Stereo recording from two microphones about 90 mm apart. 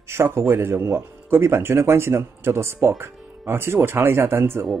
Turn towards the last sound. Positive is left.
turn(degrees=-30)  # may be behind; listen again after turning